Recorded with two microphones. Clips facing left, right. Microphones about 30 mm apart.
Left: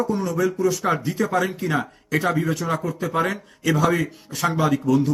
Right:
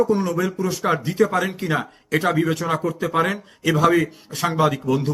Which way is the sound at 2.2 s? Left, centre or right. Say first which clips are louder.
Right 2 dB; right.